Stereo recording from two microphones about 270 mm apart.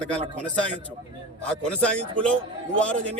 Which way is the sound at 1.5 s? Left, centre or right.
Centre.